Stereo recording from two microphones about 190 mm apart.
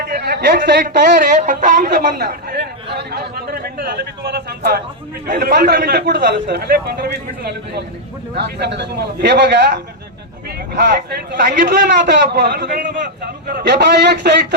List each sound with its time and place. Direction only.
0.0 s a man's voice: 55° right (ahead or behind)
1.4 s a man's voice: 40° right (ahead or behind); by 9.8 s 60° right (ahead or behind)
10.9 s a man's voice: 60° right (ahead or behind)